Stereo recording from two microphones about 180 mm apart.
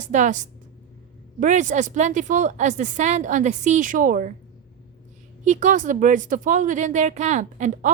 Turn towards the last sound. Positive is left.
turn(degrees=-45)  # may be behind; listen again after turning